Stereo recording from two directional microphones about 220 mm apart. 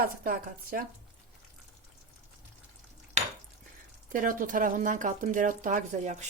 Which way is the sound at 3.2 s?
30° right (ahead or behind).